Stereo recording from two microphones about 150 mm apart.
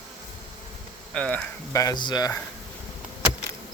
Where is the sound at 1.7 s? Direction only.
20° left (ahead or behind).